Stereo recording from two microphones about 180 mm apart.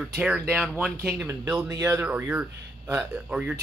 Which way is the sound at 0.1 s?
5° right (ahead or behind).